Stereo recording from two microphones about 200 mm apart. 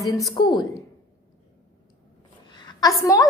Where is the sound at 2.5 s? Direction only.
20° left (ahead or behind).